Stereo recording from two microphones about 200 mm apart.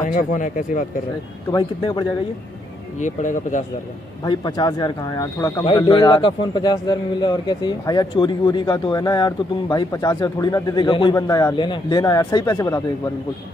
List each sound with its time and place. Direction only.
0.0 s speech: 40° left (ahead or behind)
1.5 s a man's voice: 20° left (ahead or behind)
3.0 s speech: 40° left (ahead or behind)
4.2 s a man's voice: 20° left (ahead or behind)